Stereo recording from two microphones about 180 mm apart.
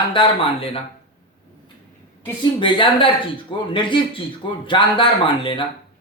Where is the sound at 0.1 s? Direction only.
30° left (ahead or behind).